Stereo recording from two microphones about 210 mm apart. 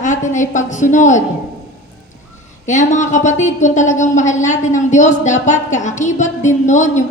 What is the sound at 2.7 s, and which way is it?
Speech, 35° left (ahead or behind).